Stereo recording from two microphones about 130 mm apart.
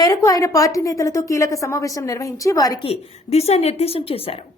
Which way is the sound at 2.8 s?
50° left (ahead or behind).